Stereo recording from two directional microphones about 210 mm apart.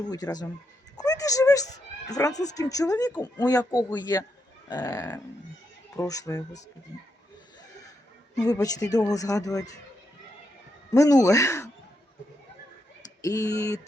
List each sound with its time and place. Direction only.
0.0 s speech: 20° left (ahead or behind)
0.9 s a sound: 15° left (ahead or behind)
2.0 s speech: 15° left (ahead or behind)
8.4 s speech: 15° left (ahead or behind)
10.9 s speech: 15° left (ahead or behind)
13.2 s speech: 15° left (ahead or behind)